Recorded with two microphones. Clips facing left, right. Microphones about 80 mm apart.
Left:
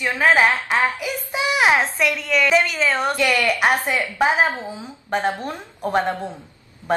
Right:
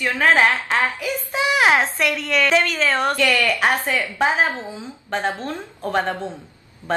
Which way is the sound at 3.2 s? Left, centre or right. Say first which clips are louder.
Even; centre.